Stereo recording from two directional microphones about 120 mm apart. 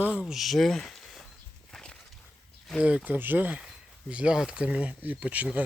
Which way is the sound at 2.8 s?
10° right (ahead or behind).